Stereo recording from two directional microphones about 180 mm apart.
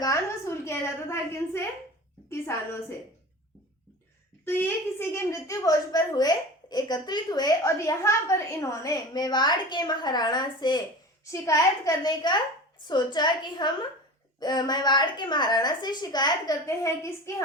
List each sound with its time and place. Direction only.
0.0 s a sound: 15° left (ahead or behind)
2.3 s a woman's voice: 15° left (ahead or behind)
4.4 s a woman's voice: 10° left (ahead or behind)